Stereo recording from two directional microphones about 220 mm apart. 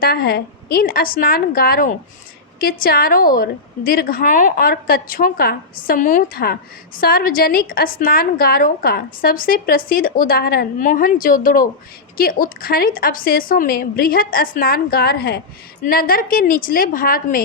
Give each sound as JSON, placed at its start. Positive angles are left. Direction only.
{"t": 0.0, "sound": "a woman's voice", "side_deg": 45}